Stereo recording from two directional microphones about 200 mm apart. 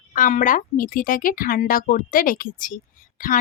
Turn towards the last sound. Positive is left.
turn(degrees=45)  # may be behind; listen again after turning